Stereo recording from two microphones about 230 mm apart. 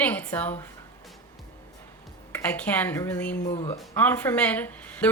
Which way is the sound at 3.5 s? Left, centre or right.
Left.